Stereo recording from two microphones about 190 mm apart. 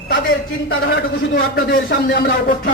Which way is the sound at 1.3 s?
55° left (ahead or behind).